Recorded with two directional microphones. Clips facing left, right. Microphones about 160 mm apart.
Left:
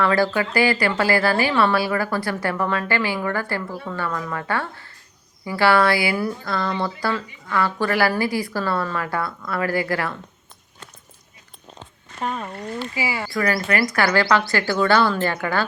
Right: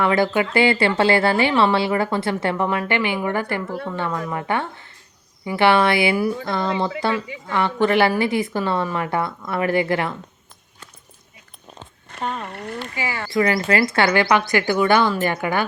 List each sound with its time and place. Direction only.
0.0 s a woman's voice: 20° right (ahead or behind)
13.0 s speech: 10° left (ahead or behind)
13.3 s a woman's voice: 20° right (ahead or behind)